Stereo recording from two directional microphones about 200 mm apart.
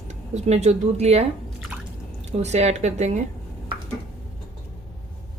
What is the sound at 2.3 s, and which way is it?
Speech, 35° right (ahead or behind).